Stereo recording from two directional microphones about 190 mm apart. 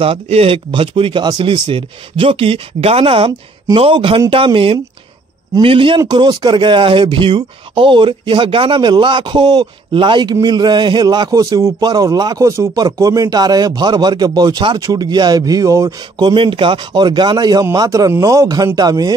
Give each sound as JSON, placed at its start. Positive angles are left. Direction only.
{"t": 0.0, "sound": "a man's voice", "side_deg": -30}